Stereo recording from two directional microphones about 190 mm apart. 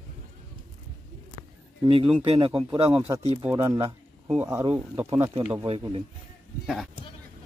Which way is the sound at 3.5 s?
15° right (ahead or behind).